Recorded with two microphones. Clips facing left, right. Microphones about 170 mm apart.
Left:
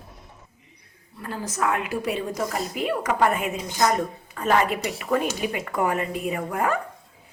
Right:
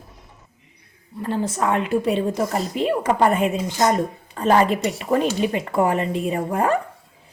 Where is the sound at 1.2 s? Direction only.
30° right (ahead or behind).